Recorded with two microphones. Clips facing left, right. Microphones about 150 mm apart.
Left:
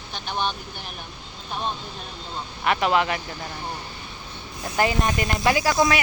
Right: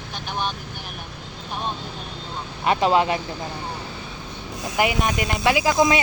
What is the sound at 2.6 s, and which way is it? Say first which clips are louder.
Speech: right 3 dB; 25° right (ahead or behind).